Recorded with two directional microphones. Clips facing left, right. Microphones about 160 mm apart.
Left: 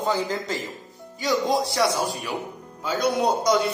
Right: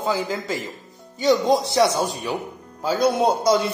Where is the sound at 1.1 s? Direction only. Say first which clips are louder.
Right 5 dB; 20° right (ahead or behind).